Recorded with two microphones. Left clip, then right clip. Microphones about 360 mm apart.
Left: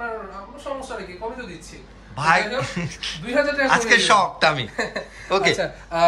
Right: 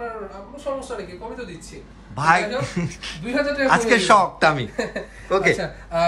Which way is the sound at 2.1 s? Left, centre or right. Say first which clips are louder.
Right 1 dB; centre.